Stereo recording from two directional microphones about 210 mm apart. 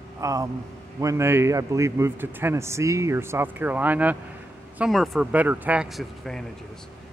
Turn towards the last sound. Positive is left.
turn(degrees=0)  # may be behind; listen again after turning